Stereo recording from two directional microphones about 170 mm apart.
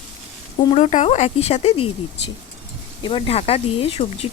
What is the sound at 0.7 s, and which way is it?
Speech, 40° left (ahead or behind).